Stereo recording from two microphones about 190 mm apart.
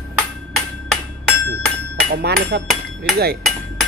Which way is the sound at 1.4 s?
60° right (ahead or behind).